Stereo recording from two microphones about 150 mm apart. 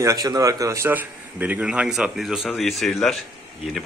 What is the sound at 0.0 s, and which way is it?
A man's voice, 25° right (ahead or behind).